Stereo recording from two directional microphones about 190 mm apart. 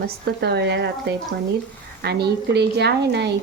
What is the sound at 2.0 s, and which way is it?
A woman's voice, 60° right (ahead or behind).